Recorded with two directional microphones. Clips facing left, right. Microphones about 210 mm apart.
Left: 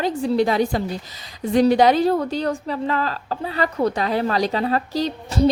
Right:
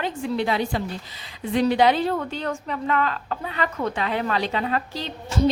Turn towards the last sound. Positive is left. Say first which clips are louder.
# left 4 dB
turn(degrees=40)  # may be behind; listen again after turning